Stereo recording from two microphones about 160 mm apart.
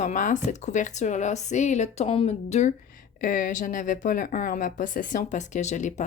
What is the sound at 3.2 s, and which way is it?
Speech, 55° left (ahead or behind).